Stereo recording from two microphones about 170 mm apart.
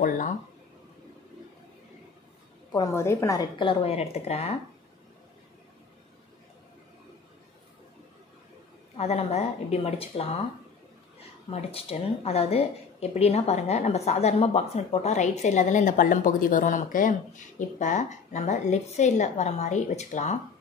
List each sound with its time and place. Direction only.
2.7 s a woman's voice: 20° left (ahead or behind); by 4.6 s 40° left (ahead or behind)
8.9 s speech: 40° left (ahead or behind)